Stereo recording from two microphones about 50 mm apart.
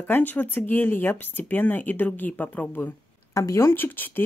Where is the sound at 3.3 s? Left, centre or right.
Left.